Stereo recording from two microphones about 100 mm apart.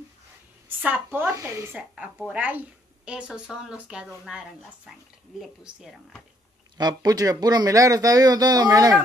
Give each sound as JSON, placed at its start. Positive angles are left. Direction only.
{"t": 0.7, "sound": "speech", "side_deg": -15}
{"t": 1.3, "sound": "speech", "side_deg": -30}
{"t": 2.2, "sound": "speech", "side_deg": -15}
{"t": 6.8, "sound": "speech", "side_deg": -40}